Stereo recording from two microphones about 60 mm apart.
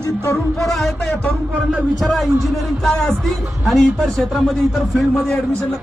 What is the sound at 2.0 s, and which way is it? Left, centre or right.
A man's voice, centre.